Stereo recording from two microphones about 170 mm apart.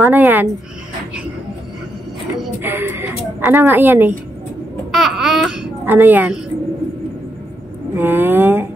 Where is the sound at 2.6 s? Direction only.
10° right (ahead or behind).